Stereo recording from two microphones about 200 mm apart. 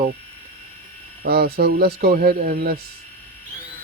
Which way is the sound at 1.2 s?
50° right (ahead or behind).